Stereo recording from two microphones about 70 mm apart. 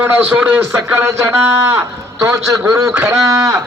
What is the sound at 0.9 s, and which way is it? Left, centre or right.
A man's voice, right.